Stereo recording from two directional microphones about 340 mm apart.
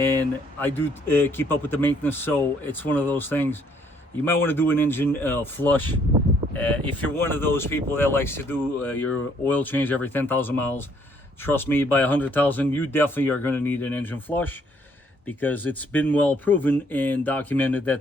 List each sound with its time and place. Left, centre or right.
0.0 s speech: centre